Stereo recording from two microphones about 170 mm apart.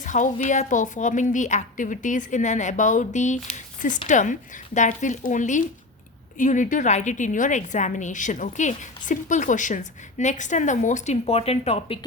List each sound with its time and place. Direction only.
0.0 s a woman's voice: 45° left (ahead or behind)